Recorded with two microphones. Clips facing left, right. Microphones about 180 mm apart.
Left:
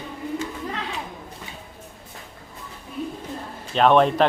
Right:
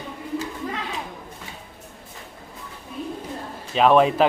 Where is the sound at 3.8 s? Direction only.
5° right (ahead or behind).